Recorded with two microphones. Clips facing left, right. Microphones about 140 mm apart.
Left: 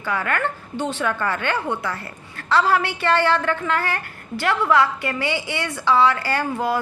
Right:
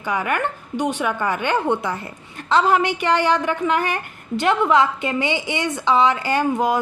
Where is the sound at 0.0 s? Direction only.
15° right (ahead or behind).